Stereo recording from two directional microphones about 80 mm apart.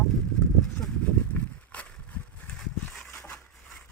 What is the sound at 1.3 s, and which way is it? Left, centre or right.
Walk, centre.